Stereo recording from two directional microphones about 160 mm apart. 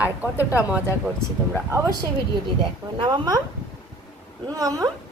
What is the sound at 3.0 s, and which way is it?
Speech, 25° right (ahead or behind).